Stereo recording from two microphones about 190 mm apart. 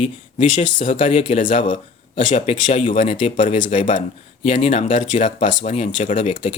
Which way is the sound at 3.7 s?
40° left (ahead or behind).